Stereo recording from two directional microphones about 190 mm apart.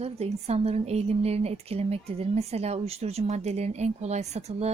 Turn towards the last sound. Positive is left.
turn(degrees=-35)  # may be behind; listen again after turning